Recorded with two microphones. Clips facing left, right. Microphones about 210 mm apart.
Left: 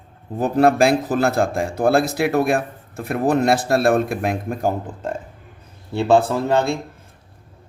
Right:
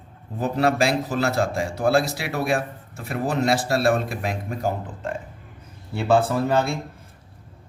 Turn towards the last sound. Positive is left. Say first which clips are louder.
# left 3 dB
turn(degrees=25)  # may be behind; listen again after turning